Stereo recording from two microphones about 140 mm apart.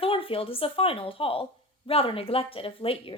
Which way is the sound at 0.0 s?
40° left (ahead or behind).